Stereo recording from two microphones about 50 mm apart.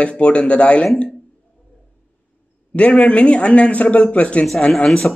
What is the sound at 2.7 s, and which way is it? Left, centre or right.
Speech, left.